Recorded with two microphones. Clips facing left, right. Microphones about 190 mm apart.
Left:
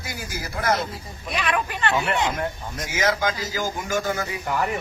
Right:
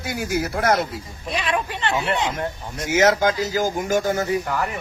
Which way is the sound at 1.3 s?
25° right (ahead or behind).